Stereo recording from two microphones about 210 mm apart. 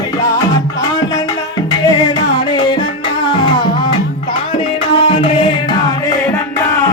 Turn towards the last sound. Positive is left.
turn(degrees=20)  # may be behind; listen again after turning